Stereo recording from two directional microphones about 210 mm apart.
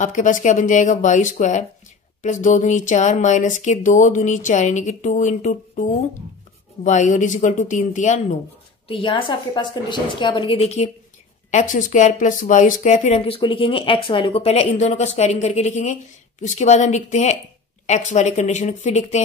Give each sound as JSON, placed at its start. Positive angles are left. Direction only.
{"t": 0.0, "sound": "speech", "side_deg": 35}
{"t": 8.8, "sound": "a woman's voice", "side_deg": 25}